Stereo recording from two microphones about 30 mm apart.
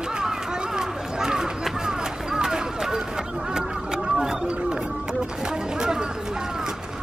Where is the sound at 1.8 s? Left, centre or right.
Right.